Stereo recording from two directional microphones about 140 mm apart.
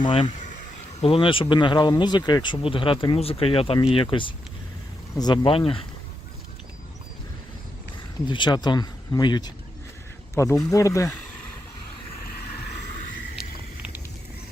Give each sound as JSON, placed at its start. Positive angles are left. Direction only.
{"t": 0.0, "sound": "speech", "side_deg": 40}
{"t": 8.3, "sound": "speech", "side_deg": 35}